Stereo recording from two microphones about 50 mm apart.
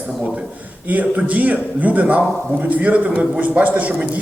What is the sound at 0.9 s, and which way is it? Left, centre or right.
A man's voice, right.